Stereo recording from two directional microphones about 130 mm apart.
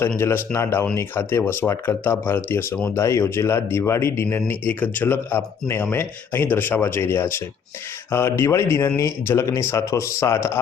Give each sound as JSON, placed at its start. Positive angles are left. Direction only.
{"t": 0.2, "sound": "speech", "side_deg": 20}